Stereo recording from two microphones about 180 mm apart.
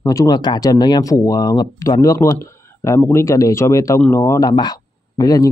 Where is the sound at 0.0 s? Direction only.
20° left (ahead or behind).